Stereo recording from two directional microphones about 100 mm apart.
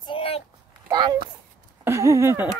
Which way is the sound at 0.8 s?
50° right (ahead or behind).